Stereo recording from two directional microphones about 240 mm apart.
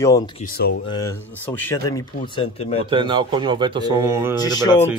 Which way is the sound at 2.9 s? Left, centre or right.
Centre.